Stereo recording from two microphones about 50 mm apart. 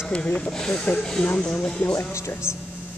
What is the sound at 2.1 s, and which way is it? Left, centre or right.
Speech, left.